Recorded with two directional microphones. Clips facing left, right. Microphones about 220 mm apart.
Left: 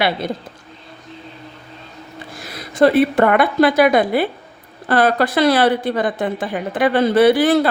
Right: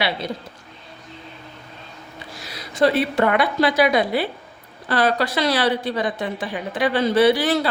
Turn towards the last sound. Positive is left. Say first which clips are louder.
# left 4 dB
turn(degrees=55)  # may be behind; listen again after turning